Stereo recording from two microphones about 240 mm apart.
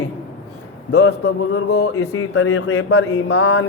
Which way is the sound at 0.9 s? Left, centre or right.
Left.